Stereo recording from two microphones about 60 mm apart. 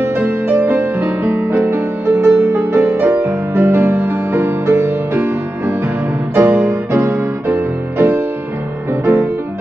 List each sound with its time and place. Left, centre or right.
0.0 s music: right
2.1 s music: right